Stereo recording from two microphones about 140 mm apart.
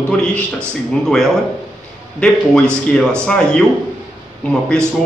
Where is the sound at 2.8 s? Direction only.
5° left (ahead or behind).